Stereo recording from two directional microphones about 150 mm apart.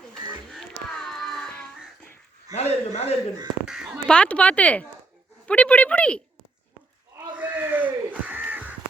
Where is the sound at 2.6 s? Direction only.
45° left (ahead or behind).